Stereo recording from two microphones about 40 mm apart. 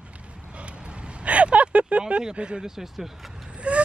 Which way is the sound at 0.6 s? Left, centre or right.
Right.